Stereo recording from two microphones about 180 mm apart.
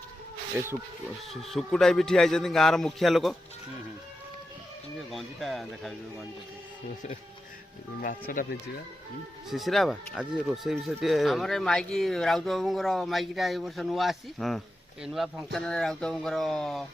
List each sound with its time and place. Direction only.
0.6 s speech: 15° right (ahead or behind)
1.3 s speech: centre (ahead or behind)
5.1 s speech: centre (ahead or behind)
8.3 s speech: 60° left (ahead or behind)
9.5 s speech: centre (ahead or behind)